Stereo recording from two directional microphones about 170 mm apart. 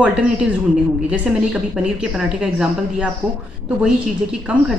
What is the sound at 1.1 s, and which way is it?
A man's voice, 5° right (ahead or behind).